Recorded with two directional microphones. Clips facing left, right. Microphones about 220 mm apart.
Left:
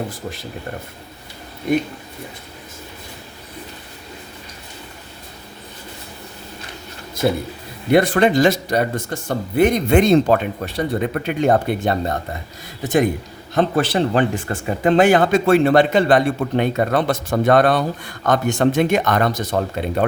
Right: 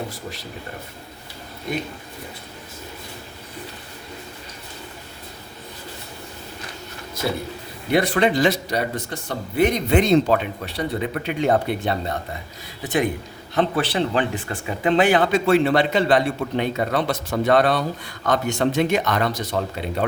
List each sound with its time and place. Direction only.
7.9 s a man's voice: 50° left (ahead or behind)